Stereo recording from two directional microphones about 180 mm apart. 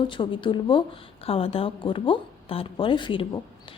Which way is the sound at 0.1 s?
25° left (ahead or behind).